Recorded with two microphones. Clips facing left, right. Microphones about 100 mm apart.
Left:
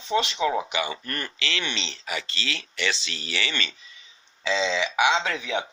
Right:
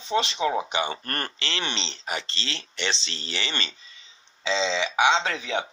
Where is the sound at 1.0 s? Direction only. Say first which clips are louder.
Right 1 dB; 45° right (ahead or behind).